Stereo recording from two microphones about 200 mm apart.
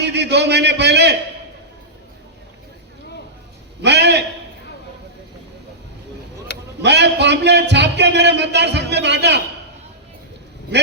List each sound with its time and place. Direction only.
0.0 s a man's voice: 60° right (ahead or behind)
3.8 s a sound: 60° right (ahead or behind)
6.8 s a man's voice: 60° right (ahead or behind)